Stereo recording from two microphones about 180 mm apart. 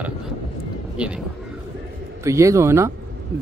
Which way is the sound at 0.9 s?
5° right (ahead or behind).